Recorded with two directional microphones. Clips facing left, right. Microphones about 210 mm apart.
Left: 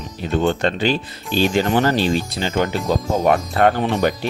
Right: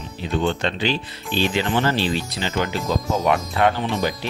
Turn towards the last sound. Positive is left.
turn(degrees=55)  # may be behind; listen again after turning